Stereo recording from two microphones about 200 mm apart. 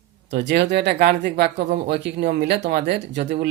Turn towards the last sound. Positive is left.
turn(degrees=-55)  # may be behind; listen again after turning